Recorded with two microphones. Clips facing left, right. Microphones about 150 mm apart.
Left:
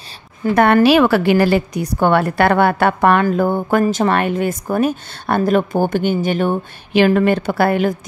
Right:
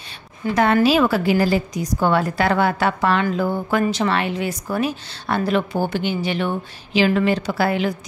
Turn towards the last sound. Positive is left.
turn(degrees=50)  # may be behind; listen again after turning